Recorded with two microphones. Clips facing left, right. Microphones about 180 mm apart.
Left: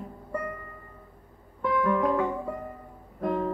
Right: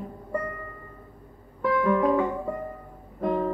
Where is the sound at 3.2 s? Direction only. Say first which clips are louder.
Right 2 dB; 30° right (ahead or behind).